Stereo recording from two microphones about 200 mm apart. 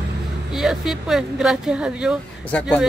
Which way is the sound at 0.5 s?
Centre (ahead or behind).